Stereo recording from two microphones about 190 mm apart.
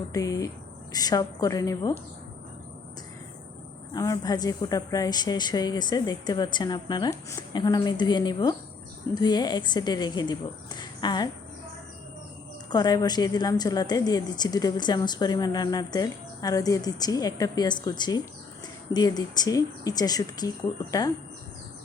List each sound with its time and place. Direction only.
0.1 s a woman's voice: 15° left (ahead or behind)
3.9 s a woman's voice: 20° left (ahead or behind)
12.7 s a woman's voice: 20° left (ahead or behind)